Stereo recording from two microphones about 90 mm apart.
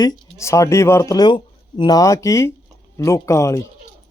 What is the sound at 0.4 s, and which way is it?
Speech, 35° left (ahead or behind).